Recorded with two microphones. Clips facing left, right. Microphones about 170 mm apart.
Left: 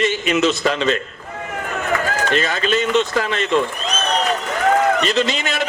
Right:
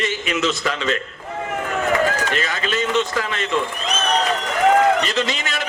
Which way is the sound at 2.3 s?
25° left (ahead or behind).